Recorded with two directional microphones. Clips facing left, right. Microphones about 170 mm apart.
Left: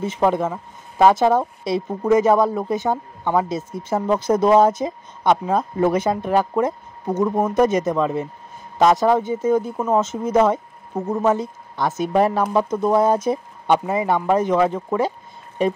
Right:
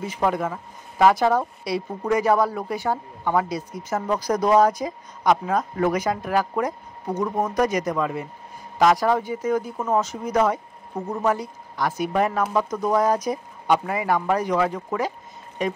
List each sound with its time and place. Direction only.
0.0 s speech: 25° left (ahead or behind)